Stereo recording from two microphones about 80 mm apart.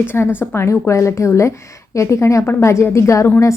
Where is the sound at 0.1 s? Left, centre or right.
Left.